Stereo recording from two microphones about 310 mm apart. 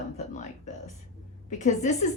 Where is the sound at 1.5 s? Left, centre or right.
Left.